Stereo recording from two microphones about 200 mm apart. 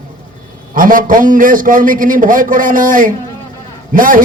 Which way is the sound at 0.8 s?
45° right (ahead or behind).